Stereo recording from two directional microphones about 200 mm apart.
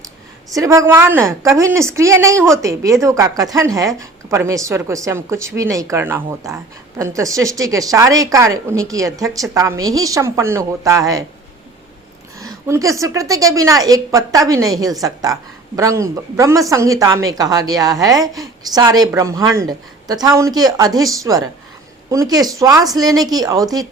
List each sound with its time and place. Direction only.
0.5 s a woman's voice: 15° right (ahead or behind)
12.4 s a woman's voice: 15° right (ahead or behind)